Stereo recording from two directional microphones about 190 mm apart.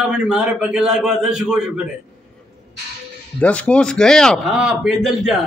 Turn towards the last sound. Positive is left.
turn(degrees=0)  # may be behind; listen again after turning